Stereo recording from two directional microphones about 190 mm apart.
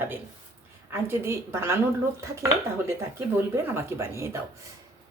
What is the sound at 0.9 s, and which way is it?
Speech, 10° right (ahead or behind).